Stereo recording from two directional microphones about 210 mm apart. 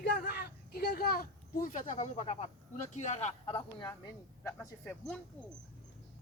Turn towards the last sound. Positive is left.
turn(degrees=5)  # may be behind; listen again after turning